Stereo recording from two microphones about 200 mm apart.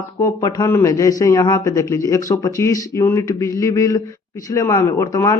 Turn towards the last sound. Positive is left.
turn(degrees=15)  # may be behind; listen again after turning